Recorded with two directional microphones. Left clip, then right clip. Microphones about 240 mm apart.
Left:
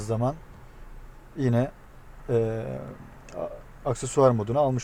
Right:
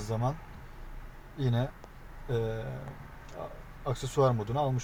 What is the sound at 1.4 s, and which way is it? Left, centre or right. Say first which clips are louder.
A man's voice: left 8 dB; left.